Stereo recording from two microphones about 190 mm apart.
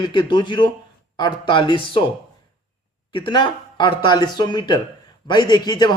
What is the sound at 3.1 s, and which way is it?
Speech, 25° left (ahead or behind).